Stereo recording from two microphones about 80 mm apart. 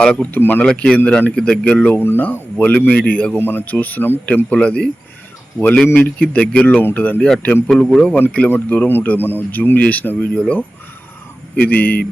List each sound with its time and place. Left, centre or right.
0.0 s speech: centre
0.3 s speech: left
0.6 s speech: centre
2.0 s speech: left
11.5 s speech: left